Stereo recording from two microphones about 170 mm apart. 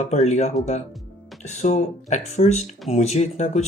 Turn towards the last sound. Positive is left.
turn(degrees=45)  # may be behind; listen again after turning